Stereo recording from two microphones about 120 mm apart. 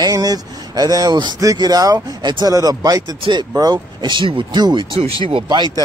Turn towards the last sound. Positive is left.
turn(degrees=-40)  # may be behind; listen again after turning